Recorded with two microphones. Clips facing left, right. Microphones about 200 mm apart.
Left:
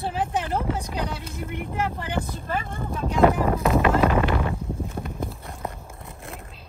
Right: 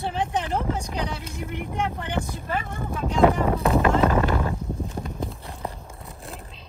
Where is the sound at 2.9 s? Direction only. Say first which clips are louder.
Even; 5° left (ahead or behind).